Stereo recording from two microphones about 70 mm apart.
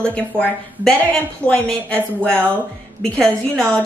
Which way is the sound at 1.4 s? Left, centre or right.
Centre.